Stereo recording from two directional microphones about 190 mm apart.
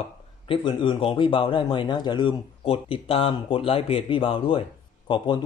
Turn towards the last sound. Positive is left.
turn(degrees=25)  # may be behind; listen again after turning